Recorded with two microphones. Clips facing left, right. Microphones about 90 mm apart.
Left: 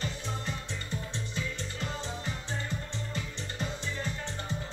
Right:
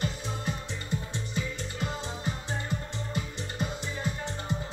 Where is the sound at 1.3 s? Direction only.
15° right (ahead or behind).